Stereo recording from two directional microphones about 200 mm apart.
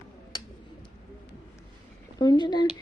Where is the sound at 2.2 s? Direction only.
20° left (ahead or behind).